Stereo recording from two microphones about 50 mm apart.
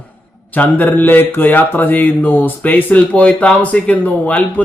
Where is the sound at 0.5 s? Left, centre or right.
Left.